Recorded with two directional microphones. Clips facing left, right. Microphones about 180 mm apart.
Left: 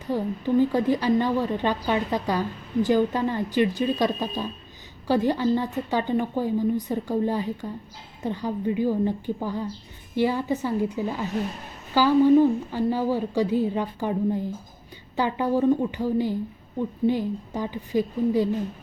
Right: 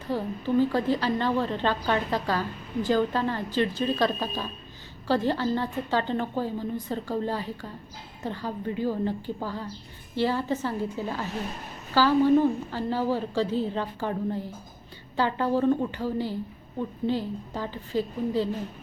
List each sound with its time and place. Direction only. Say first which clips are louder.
0.1 s a woman's voice: left 3 dB; 15° left (ahead or behind)